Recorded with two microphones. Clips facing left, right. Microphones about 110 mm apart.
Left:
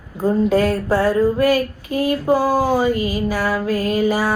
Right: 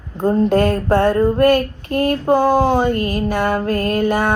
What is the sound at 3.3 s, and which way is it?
Mantra, 55° right (ahead or behind).